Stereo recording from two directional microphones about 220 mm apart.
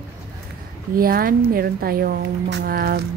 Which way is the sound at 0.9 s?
40° right (ahead or behind).